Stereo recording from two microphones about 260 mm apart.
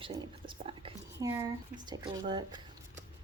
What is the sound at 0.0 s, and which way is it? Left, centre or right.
Speech, centre.